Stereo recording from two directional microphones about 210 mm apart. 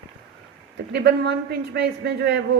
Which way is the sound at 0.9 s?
50° right (ahead or behind).